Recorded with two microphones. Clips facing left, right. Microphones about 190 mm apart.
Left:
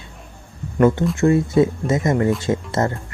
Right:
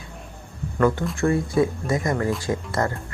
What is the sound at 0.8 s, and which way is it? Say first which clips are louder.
Speech: left 5 dB; 20° left (ahead or behind).